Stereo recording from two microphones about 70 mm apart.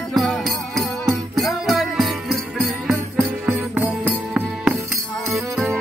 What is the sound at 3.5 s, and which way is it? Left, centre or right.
Music, right.